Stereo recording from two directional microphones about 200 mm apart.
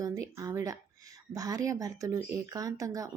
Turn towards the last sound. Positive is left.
turn(degrees=-15)  # may be behind; listen again after turning